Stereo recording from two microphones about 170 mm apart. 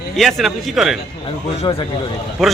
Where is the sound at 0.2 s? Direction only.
Centre (ahead or behind).